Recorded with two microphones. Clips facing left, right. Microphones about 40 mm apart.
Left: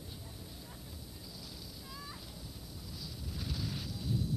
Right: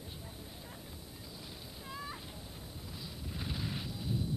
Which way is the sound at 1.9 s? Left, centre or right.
Right.